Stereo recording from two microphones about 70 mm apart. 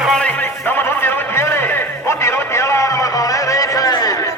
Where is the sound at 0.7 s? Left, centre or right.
Left.